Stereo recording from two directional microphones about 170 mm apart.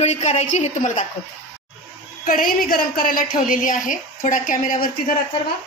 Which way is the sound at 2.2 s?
55° left (ahead or behind).